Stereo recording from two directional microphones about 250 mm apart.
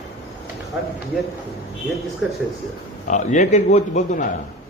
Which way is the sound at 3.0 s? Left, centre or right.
Left.